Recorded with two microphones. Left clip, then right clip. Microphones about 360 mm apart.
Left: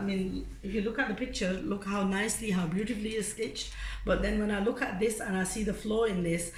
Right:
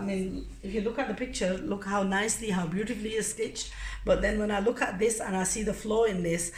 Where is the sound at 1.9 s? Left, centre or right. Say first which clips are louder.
Right 4 dB; centre.